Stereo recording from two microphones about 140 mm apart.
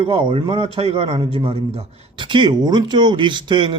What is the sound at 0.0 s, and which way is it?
A man's voice, 40° right (ahead or behind).